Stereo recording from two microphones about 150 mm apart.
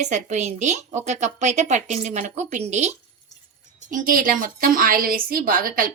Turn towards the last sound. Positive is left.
turn(degrees=-70)  # may be behind; listen again after turning